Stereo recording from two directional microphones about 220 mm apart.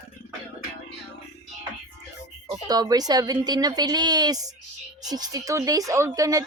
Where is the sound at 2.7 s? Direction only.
15° right (ahead or behind).